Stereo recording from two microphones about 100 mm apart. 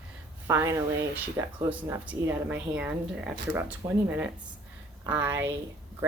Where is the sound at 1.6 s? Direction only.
15° right (ahead or behind).